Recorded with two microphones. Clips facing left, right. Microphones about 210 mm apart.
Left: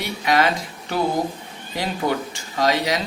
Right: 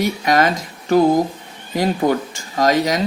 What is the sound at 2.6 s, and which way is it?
Speech, 45° right (ahead or behind).